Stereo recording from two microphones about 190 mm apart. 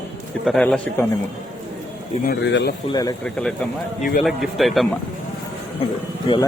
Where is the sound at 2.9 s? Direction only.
20° left (ahead or behind).